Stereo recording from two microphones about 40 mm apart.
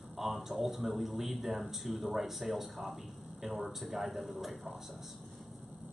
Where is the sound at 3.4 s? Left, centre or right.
Right.